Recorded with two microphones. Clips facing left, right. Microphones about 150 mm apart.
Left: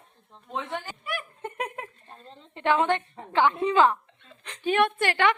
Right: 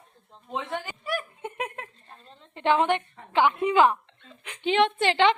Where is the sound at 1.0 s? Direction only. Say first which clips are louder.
Right 4 dB; 35° right (ahead or behind).